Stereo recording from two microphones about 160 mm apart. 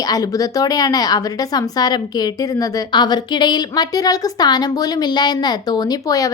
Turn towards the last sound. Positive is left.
turn(degrees=20)  # may be behind; listen again after turning